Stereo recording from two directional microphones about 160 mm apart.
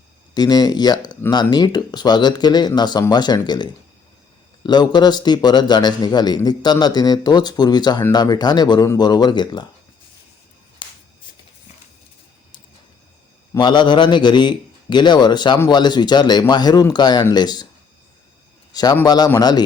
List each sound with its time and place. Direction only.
0.3 s a man's voice: 25° left (ahead or behind)
10.8 s a sound: 30° left (ahead or behind)
13.5 s a man's voice: 30° left (ahead or behind)
18.7 s a man's voice: 25° left (ahead or behind)